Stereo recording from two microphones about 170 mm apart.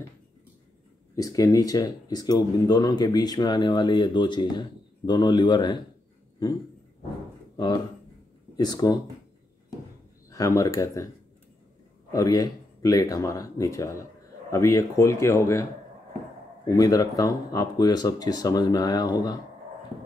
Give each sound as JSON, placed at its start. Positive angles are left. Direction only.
{"t": 1.1, "sound": "speech", "side_deg": 20}
{"t": 7.5, "sound": "speech", "side_deg": 25}
{"t": 10.3, "sound": "speech", "side_deg": 20}
{"t": 12.1, "sound": "a man's voice", "side_deg": 20}
{"t": 16.6, "sound": "speech", "side_deg": 20}